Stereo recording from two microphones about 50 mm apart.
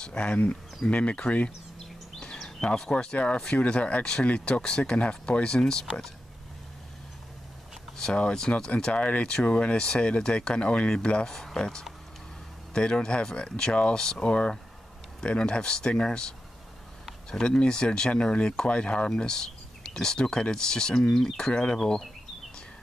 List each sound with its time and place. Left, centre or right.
0.0 s speech: centre
2.6 s speech: centre
8.0 s speech: centre
11.2 s speech: centre